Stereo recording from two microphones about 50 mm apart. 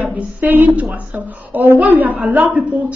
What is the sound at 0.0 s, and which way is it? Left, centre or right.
A woman's voice, right.